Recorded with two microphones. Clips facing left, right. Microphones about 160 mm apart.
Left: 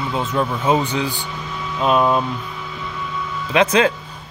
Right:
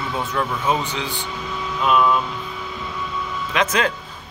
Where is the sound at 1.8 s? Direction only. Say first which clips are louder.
Left 2 dB; 35° left (ahead or behind).